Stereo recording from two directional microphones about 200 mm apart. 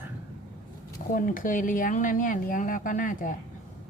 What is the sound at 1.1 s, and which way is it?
Speech, 40° left (ahead or behind).